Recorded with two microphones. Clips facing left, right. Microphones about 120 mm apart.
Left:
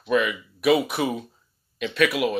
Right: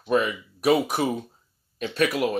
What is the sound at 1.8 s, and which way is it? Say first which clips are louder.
Speech: left 1 dB; 35° right (ahead or behind).